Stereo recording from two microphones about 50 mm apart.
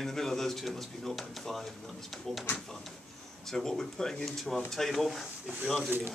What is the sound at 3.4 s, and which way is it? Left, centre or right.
A man's voice, centre.